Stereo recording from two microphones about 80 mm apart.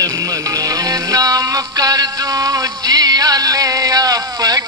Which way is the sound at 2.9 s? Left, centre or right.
Right.